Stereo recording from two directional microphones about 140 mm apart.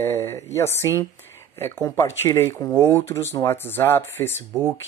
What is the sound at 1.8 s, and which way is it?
Speech, 25° left (ahead or behind).